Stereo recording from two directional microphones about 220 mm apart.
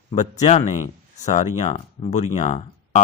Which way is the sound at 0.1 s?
30° left (ahead or behind).